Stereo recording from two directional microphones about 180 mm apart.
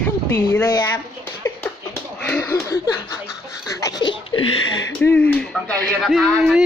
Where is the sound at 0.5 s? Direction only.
20° left (ahead or behind).